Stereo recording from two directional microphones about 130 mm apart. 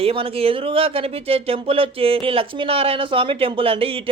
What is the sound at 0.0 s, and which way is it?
Speech, 45° right (ahead or behind).